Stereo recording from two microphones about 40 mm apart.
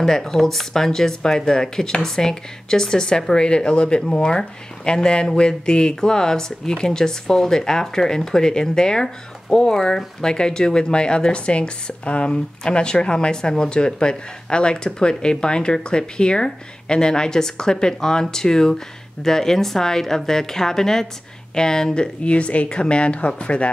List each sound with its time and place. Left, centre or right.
0.0 s speech: centre; by 23.7 s left